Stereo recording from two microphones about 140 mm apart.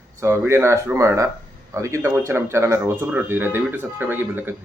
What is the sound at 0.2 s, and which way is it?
Speech, 20° right (ahead or behind).